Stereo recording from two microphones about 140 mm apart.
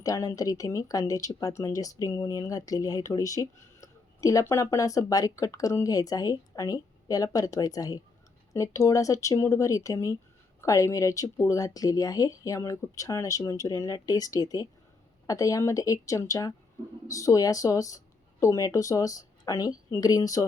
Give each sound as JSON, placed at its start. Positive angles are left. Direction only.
{"t": 0.0, "sound": "speech", "side_deg": 25}